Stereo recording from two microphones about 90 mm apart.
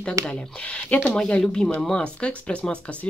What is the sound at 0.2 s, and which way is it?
Speech, 10° left (ahead or behind).